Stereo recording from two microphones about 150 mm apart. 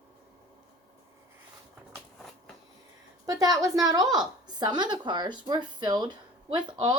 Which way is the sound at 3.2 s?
25° right (ahead or behind).